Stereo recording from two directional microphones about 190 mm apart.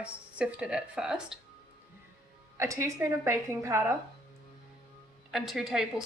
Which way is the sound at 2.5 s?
15° right (ahead or behind).